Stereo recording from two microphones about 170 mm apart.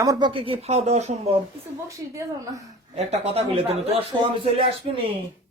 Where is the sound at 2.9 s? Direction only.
40° right (ahead or behind).